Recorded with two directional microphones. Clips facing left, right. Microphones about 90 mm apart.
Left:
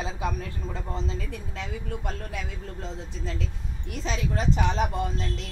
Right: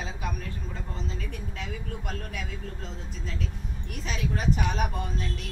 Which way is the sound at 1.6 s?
25° left (ahead or behind).